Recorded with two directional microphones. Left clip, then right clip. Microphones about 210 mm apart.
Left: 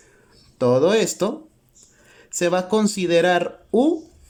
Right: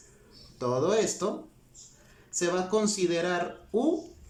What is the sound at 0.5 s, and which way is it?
Speech, 45° left (ahead or behind).